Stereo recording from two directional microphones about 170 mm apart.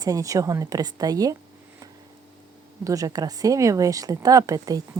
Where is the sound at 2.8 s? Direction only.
20° right (ahead or behind).